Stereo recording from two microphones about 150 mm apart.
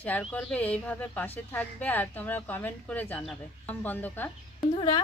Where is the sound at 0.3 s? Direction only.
5° left (ahead or behind).